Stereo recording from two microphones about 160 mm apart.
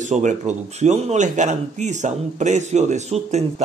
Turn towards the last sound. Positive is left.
turn(degrees=-45)  # may be behind; listen again after turning